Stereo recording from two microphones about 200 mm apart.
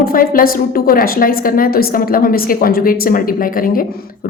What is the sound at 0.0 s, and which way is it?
Speech, 45° left (ahead or behind).